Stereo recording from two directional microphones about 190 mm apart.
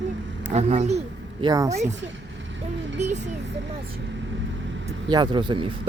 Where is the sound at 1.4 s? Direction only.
20° right (ahead or behind).